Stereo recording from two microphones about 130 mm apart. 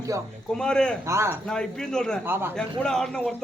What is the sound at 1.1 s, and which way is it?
Speech, 20° right (ahead or behind).